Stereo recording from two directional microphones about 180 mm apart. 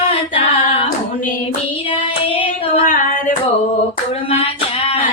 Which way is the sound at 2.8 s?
50° left (ahead or behind).